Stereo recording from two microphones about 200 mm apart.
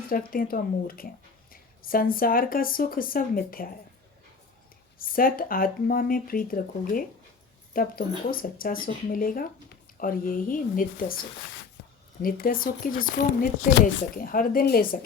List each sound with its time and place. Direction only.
0.1 s speech: 45° left (ahead or behind)
4.9 s speech: 45° left (ahead or behind)